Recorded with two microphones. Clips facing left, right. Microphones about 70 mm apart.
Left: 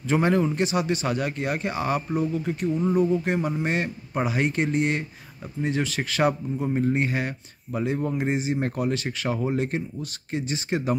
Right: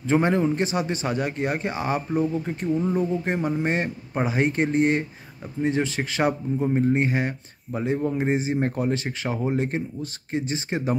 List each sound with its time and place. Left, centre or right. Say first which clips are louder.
0.0 s a man's voice: right 1 dB; right
2.8 s a sound: left 4 dB; centre
3.6 s a man's voice: right 1 dB; right